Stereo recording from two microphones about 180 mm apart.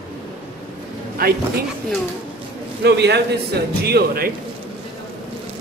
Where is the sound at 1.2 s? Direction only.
55° right (ahead or behind).